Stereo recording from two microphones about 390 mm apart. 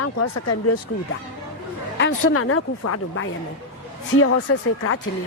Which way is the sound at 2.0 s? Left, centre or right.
Left.